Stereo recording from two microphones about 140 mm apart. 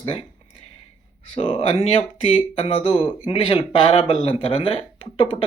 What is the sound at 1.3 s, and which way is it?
Speech, 40° left (ahead or behind).